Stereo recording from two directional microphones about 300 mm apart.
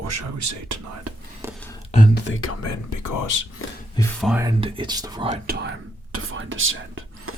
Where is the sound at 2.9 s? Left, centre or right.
Left.